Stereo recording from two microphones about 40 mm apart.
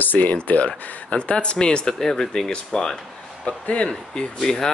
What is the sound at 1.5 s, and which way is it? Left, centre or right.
Speech, centre.